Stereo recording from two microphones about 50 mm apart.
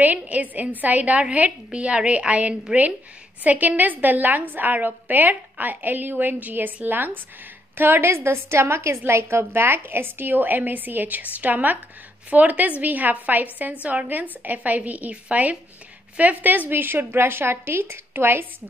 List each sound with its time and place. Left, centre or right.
0.0 s a woman's voice: right